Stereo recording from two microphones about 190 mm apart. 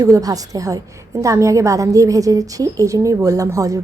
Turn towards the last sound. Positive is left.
turn(degrees=-15)  # may be behind; listen again after turning